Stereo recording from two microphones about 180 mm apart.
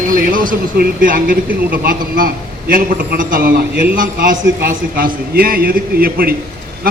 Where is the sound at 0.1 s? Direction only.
50° right (ahead or behind).